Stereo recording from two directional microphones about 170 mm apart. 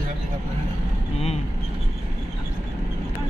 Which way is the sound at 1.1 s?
40° left (ahead or behind).